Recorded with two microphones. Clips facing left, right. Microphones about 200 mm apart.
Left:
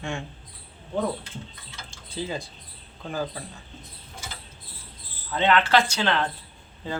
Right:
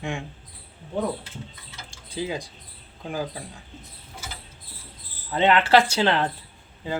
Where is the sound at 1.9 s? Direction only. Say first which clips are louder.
Right 2 dB; 10° right (ahead or behind).